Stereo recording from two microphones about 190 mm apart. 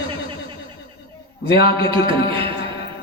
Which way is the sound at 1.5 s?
25° right (ahead or behind).